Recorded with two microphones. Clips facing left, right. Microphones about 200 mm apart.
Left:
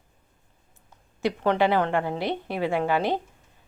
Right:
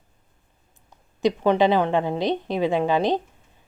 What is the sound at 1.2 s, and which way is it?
A woman's voice, 15° right (ahead or behind).